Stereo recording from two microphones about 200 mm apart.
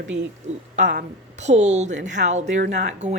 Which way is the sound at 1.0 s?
35° right (ahead or behind).